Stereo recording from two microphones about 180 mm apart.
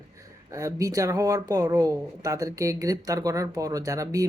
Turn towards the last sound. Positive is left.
turn(degrees=-20)  # may be behind; listen again after turning